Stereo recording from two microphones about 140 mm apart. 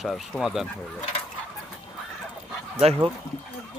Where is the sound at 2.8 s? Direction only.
45° right (ahead or behind).